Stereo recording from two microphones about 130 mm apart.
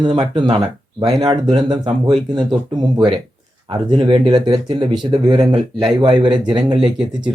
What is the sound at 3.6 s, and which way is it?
Speech, 40° right (ahead or behind).